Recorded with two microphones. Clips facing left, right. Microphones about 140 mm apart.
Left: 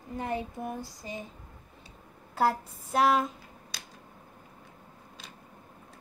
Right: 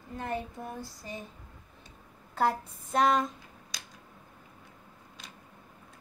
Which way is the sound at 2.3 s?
10° left (ahead or behind).